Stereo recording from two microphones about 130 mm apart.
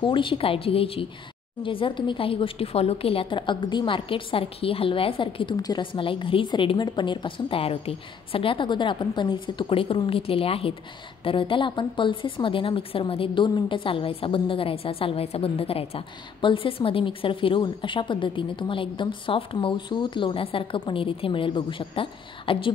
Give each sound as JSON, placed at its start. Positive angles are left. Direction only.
{"t": 0.0, "sound": "a woman's voice", "side_deg": 40}